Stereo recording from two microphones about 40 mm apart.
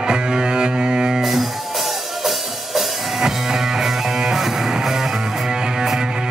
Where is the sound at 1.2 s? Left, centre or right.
Centre.